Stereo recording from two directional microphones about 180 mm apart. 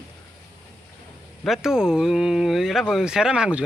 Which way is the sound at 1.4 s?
5° right (ahead or behind).